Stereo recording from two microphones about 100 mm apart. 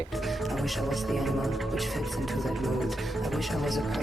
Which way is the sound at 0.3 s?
Centre (ahead or behind).